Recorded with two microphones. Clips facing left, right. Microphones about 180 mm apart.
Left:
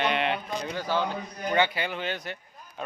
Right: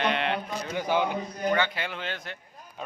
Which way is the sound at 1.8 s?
Centre (ahead or behind).